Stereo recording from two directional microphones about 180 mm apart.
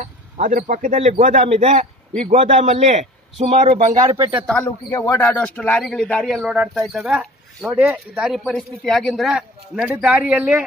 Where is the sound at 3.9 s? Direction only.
20° right (ahead or behind).